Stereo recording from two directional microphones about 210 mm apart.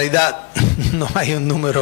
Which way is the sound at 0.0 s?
10° left (ahead or behind).